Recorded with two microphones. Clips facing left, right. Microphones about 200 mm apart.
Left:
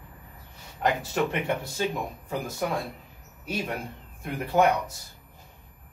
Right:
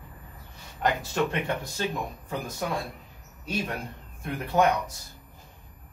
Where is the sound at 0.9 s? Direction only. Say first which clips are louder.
Left 1 dB; 5° left (ahead or behind).